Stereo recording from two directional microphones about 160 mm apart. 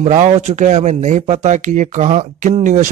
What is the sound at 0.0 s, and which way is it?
Speech, 45° right (ahead or behind).